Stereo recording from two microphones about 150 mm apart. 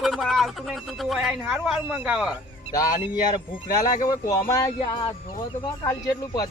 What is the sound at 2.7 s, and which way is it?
Speech, 25° left (ahead or behind).